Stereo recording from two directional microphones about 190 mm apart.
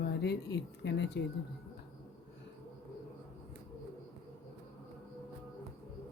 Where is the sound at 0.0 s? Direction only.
60° left (ahead or behind).